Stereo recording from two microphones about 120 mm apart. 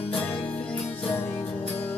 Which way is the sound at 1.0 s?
20° left (ahead or behind).